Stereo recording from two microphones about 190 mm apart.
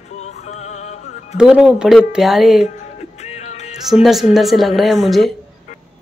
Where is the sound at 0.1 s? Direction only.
35° left (ahead or behind).